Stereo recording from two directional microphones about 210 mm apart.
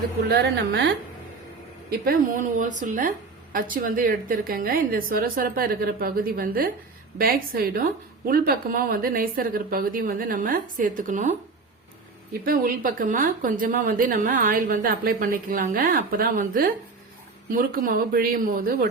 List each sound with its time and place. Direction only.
0.3 s a woman's voice: 50° right (ahead or behind)
1.9 s a woman's voice: 40° right (ahead or behind)
12.5 s a woman's voice: 40° right (ahead or behind)